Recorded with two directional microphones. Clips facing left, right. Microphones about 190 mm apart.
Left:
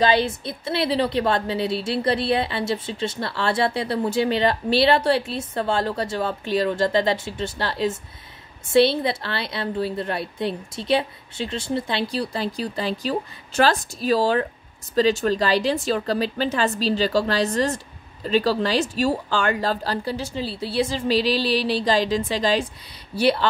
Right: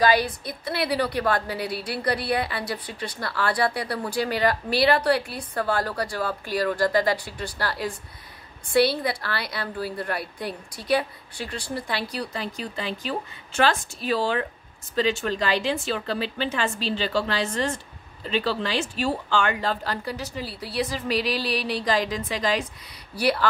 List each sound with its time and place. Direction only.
0.0 s a woman's voice: 25° left (ahead or behind)